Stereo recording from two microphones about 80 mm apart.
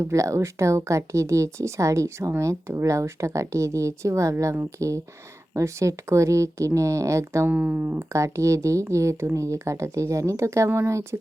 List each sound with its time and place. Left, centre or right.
0.0 s speech: right
7.4 s speech: centre
8.1 s speech: right